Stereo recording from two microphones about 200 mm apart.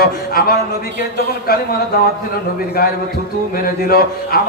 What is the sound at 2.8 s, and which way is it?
A man's voice, 50° left (ahead or behind).